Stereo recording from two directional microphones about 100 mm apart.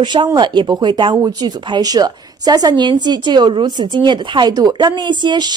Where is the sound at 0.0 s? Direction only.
50° right (ahead or behind).